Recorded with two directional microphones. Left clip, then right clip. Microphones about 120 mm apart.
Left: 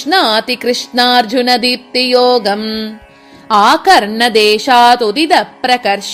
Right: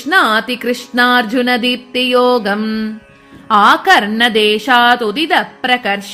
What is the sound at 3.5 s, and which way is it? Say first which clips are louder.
Music: left 1 dB; 45° left (ahead or behind).